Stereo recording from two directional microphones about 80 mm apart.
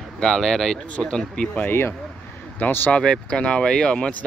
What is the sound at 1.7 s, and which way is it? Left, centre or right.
Speech, left.